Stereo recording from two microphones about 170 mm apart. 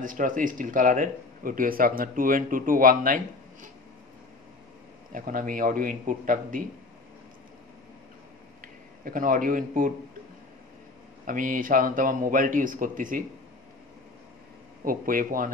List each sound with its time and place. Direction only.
0.0 s a man's voice: 50° right (ahead or behind)
5.1 s a man's voice: 55° right (ahead or behind)
9.0 s a man's voice: 55° right (ahead or behind)
11.2 s a man's voice: 50° right (ahead or behind)
14.9 s speech: 55° right (ahead or behind)